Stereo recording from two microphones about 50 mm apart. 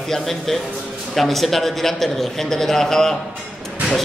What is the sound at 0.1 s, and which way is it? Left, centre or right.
A man's voice, centre.